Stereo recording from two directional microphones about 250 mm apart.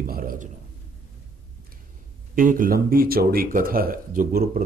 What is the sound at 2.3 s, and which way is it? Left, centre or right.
Speech, right.